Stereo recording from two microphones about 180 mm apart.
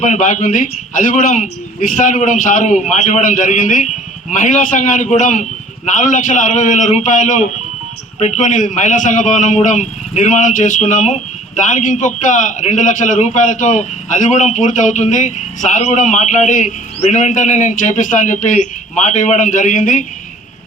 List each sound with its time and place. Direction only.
0.0 s a man's voice: 45° left (ahead or behind)